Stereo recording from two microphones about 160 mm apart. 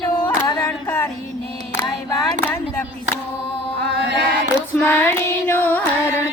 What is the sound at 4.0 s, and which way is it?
Music, 90° right.